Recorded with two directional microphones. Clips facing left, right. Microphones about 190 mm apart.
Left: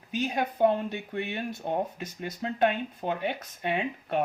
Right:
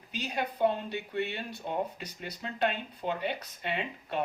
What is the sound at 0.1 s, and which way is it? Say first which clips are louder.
Speech: left 5 dB; 50° left (ahead or behind).